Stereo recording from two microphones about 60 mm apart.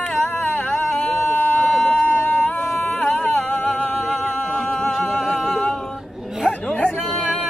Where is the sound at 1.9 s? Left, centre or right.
Left.